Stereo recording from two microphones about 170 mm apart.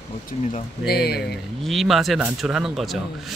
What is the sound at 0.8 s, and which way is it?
Speech, 70° left (ahead or behind).